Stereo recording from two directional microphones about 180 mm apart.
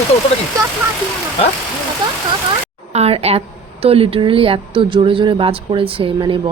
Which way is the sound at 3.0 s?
35° right (ahead or behind).